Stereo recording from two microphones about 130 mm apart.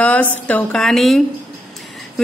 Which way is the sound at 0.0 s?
10° left (ahead or behind).